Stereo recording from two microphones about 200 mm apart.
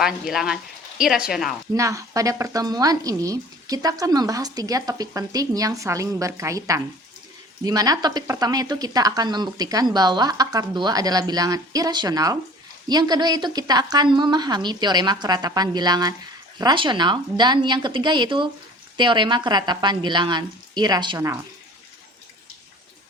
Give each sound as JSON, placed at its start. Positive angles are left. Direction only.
{"t": 0.0, "sound": "speech", "side_deg": 0}
{"t": 1.7, "sound": "speech", "side_deg": -15}